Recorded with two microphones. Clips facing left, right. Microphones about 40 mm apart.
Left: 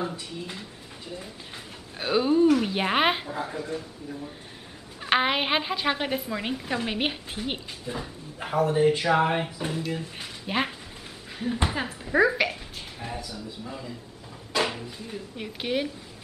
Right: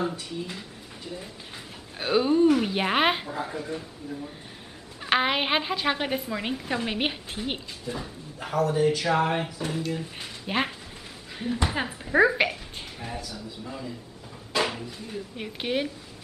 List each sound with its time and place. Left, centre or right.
0.1 s a woman's voice: centre
2.0 s a woman's voice: centre
5.0 s a woman's voice: centre
13.3 s a woman's voice: centre
14.5 s a sound: centre
15.3 s speech: centre